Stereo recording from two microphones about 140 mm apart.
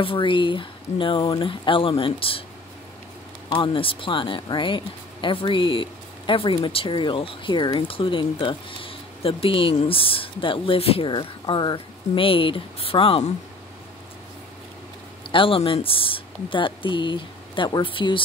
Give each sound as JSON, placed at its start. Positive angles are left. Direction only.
{"t": 0.0, "sound": "speech", "side_deg": 40}
{"t": 3.4, "sound": "speech", "side_deg": 35}
{"t": 15.3, "sound": "speech", "side_deg": 40}